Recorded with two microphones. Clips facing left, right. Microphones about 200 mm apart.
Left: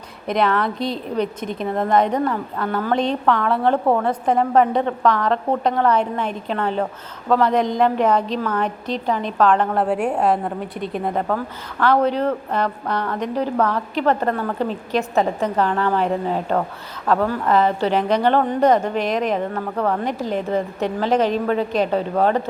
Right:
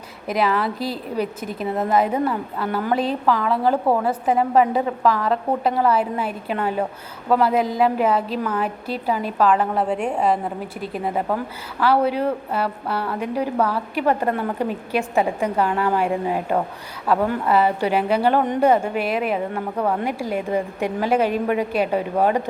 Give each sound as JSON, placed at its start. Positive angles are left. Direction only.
{"t": 0.3, "sound": "a woman's voice", "side_deg": -5}
{"t": 9.9, "sound": "a woman's voice", "side_deg": 5}